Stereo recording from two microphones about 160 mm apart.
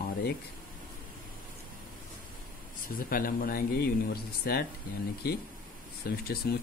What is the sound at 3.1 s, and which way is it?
Speech, 60° left (ahead or behind).